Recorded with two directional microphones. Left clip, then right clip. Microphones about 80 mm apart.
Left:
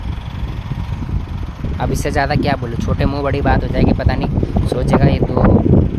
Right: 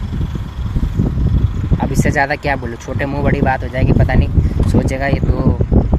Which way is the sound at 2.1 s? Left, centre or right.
Centre.